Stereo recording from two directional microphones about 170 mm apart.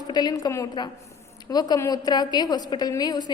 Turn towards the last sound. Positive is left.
turn(degrees=25)  # may be behind; listen again after turning